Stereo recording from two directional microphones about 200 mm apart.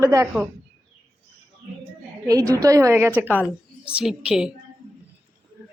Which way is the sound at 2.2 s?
15° right (ahead or behind).